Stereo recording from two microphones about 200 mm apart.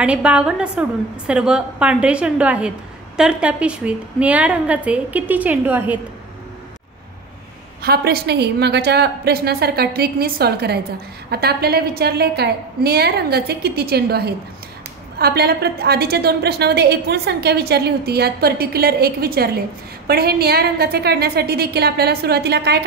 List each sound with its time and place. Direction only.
0.0 s a woman's voice: 5° right (ahead or behind)
7.8 s a woman's voice: 50° right (ahead or behind)